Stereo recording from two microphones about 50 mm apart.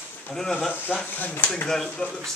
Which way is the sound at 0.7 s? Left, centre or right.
Left.